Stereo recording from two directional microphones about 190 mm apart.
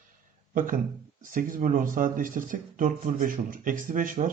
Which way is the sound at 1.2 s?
45° right (ahead or behind).